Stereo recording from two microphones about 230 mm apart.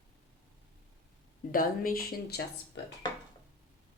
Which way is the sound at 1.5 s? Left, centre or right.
Left.